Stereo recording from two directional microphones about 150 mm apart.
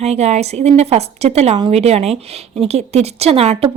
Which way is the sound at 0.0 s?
45° right (ahead or behind).